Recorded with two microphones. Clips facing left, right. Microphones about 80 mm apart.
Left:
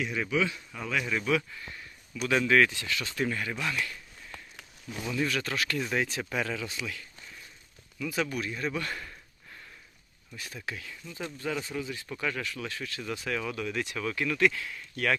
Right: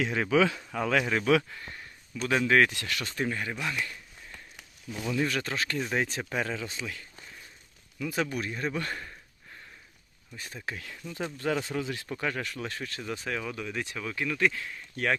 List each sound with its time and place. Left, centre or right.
0.0 s speech: right
2.6 s speech: right
3.0 s speech: right
3.2 s speech: right
5.0 s speech: right
10.3 s speech: right
11.0 s speech: right
11.3 s speech: right
11.8 s speech: right
12.0 s speech: right
13.0 s speech: right